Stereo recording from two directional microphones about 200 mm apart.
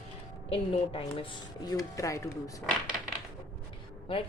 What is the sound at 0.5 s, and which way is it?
Speech, 25° left (ahead or behind).